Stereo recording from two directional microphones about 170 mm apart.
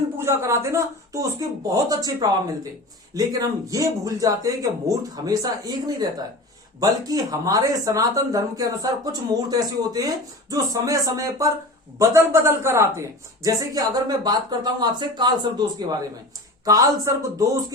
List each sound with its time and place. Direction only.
0.2 s speech: 15° right (ahead or behind)